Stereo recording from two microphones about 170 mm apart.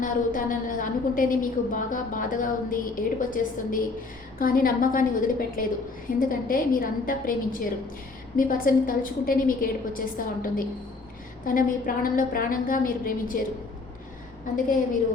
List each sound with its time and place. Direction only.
0.0 s a woman's voice: 55° left (ahead or behind)